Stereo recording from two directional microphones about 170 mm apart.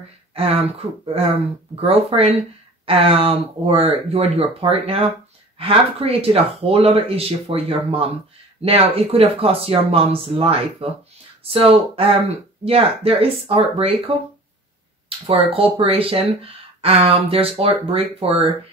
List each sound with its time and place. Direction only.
0.3 s speech: 35° right (ahead or behind)
1.8 s speech: 35° right (ahead or behind)